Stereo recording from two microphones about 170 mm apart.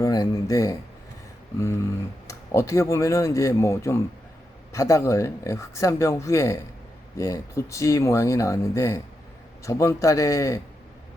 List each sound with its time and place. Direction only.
0.0 s speech: 20° left (ahead or behind)
2.2 s a man's voice: 15° left (ahead or behind)